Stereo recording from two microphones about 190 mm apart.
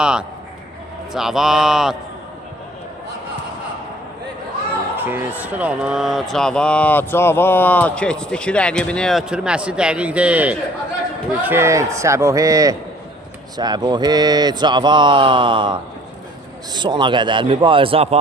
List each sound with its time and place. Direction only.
0.0 s speech: 5° right (ahead or behind)
4.9 s speech: 10° right (ahead or behind); by 18.2 s 30° right (ahead or behind)